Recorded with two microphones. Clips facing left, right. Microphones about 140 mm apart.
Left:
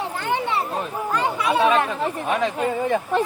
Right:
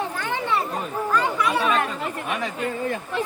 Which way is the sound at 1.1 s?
25° left (ahead or behind).